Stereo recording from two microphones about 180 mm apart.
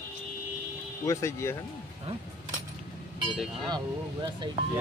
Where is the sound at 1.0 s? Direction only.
15° left (ahead or behind).